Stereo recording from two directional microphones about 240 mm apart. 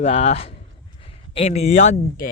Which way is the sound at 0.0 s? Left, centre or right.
Left.